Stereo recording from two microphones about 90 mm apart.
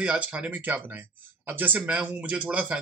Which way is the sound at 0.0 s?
15° right (ahead or behind).